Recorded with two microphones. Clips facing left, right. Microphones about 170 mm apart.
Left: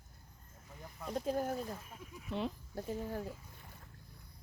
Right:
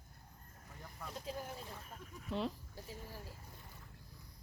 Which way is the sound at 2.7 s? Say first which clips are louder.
Left 11 dB; 55° left (ahead or behind).